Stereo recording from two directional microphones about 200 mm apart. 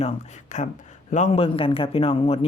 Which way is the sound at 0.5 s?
35° left (ahead or behind).